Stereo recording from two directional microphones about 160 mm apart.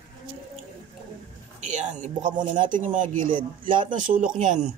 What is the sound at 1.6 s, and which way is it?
Speech, 50° right (ahead or behind).